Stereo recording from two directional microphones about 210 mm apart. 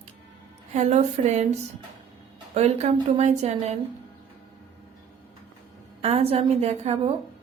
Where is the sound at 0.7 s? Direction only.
30° right (ahead or behind).